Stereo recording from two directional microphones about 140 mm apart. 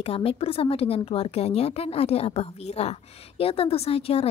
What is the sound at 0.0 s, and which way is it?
Speech, 45° left (ahead or behind).